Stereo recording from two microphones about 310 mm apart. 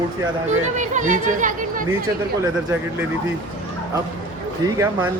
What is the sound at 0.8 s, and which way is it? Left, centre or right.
Speech, right.